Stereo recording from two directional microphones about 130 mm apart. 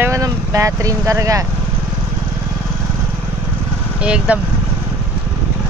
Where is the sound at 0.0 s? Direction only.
25° right (ahead or behind).